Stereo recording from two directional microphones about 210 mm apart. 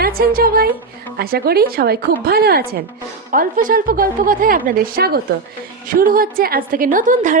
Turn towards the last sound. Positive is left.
turn(degrees=-35)  # may be behind; listen again after turning